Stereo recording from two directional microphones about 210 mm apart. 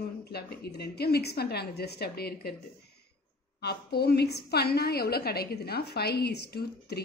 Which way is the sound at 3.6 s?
50° left (ahead or behind).